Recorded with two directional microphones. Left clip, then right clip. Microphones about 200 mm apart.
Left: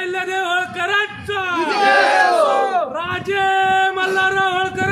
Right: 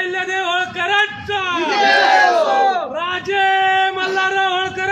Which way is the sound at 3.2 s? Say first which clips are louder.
Right 1 dB; 15° left (ahead or behind).